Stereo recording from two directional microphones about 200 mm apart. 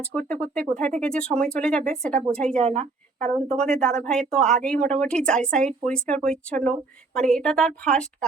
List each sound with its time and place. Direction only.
0.0 s speech: 5° left (ahead or behind)
2.6 s a woman's voice: 30° right (ahead or behind)
3.5 s speech: 5° left (ahead or behind)